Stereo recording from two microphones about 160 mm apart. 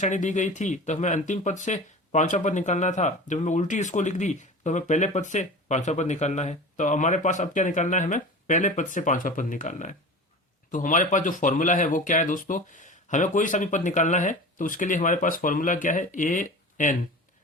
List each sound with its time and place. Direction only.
0.0 s speech: 50° left (ahead or behind)